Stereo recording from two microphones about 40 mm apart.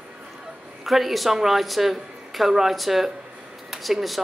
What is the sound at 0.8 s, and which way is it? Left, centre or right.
A woman's voice, centre.